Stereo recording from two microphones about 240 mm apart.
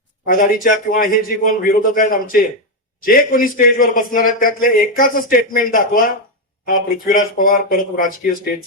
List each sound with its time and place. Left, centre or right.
0.3 s speech: left